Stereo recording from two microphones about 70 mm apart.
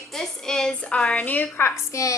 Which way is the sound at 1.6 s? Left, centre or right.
Left.